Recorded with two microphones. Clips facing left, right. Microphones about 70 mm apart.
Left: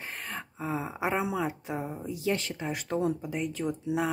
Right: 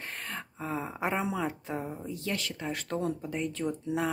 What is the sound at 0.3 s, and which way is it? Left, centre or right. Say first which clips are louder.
Speech: left 2 dB; centre.